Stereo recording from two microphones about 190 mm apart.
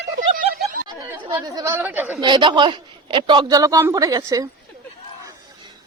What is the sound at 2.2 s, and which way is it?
A man's voice, 25° right (ahead or behind).